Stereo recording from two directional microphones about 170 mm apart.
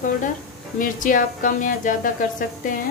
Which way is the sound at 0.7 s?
50° left (ahead or behind).